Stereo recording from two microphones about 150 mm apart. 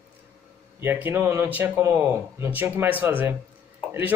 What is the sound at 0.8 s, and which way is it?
Speech, 15° right (ahead or behind).